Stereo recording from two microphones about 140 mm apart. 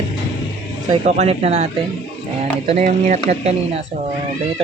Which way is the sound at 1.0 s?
55° right (ahead or behind).